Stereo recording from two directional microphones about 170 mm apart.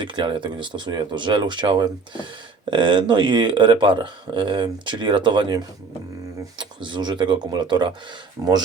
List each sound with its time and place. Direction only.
0.0 s speech: 30° right (ahead or behind)